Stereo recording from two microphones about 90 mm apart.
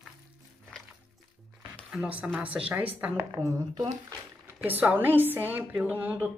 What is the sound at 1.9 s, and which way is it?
Speech, 15° right (ahead or behind).